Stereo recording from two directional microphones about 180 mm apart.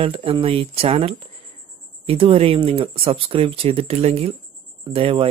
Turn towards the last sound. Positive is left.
turn(degrees=-30)  # may be behind; listen again after turning